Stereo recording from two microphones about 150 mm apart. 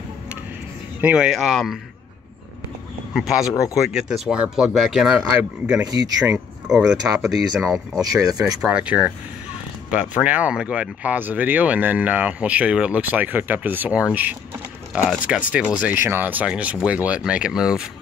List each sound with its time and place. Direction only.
1.0 s speech: 5° right (ahead or behind)
3.1 s speech: 5° right (ahead or behind)
8.0 s speech: 25° right (ahead or behind)
8.5 s speech: 5° right (ahead or behind)